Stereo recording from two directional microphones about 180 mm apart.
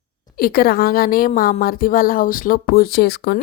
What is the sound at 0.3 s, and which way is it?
A woman's voice, 55° left (ahead or behind).